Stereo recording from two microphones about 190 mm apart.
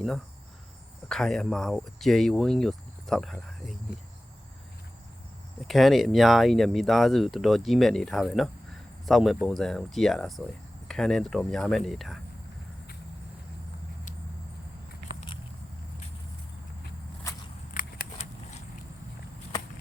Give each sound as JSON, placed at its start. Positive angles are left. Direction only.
{"t": 1.0, "sound": "speech", "side_deg": 0}
{"t": 5.5, "sound": "speech", "side_deg": 0}
{"t": 17.7, "sound": "scissors", "side_deg": 45}
{"t": 18.2, "sound": "a sound", "side_deg": 35}